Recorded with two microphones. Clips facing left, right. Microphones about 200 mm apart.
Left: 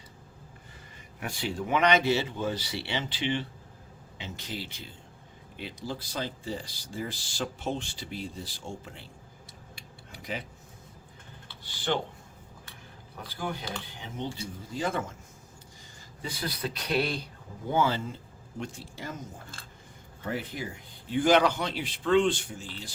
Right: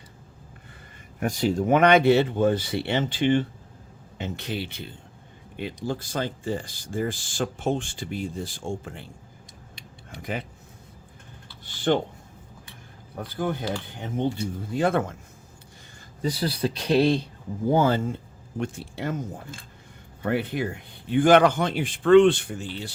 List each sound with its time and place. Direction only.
1.2 s speech: 40° right (ahead or behind)
4.2 s speech: 65° right (ahead or behind)
13.1 s speech: 55° right (ahead or behind)
16.2 s speech: 35° right (ahead or behind)
17.7 s speech: 45° right (ahead or behind); by 19.1 s 60° right (ahead or behind)
20.2 s speech: 65° right (ahead or behind)